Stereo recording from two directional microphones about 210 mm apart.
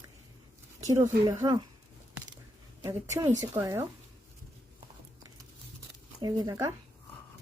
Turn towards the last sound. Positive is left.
turn(degrees=-15)  # may be behind; listen again after turning